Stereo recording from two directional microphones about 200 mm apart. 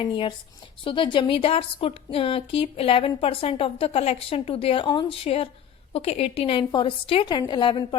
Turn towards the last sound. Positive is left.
turn(degrees=25)  # may be behind; listen again after turning